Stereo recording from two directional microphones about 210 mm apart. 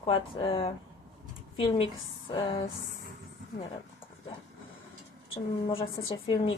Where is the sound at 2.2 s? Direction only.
25° left (ahead or behind).